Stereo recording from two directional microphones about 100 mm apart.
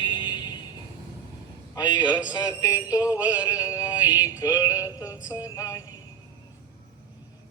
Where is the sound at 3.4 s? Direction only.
35° left (ahead or behind).